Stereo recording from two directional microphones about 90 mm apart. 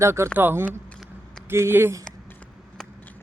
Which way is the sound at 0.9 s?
5° left (ahead or behind).